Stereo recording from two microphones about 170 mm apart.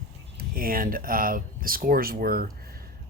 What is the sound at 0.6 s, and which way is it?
Speech, 60° right (ahead or behind).